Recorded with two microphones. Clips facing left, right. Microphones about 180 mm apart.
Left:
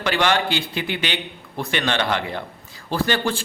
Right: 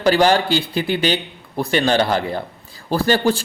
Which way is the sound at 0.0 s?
35° right (ahead or behind).